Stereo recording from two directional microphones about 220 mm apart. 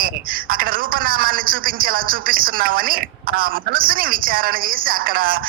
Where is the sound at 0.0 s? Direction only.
40° right (ahead or behind).